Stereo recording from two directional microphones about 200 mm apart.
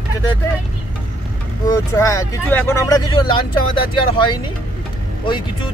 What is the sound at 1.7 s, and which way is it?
Speech, 15° left (ahead or behind).